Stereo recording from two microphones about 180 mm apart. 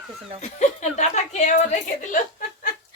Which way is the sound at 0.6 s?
40° left (ahead or behind).